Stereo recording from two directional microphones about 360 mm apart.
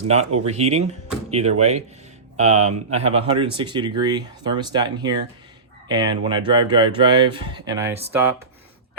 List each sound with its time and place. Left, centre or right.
0.4 s speech: centre